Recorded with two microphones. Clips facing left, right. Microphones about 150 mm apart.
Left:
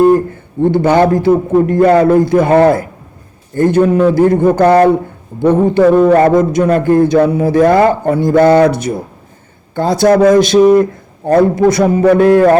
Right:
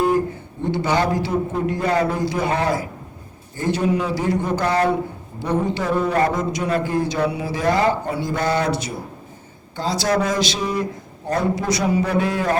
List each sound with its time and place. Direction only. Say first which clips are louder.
0.6 s a man's voice: left 11 dB; 55° left (ahead or behind)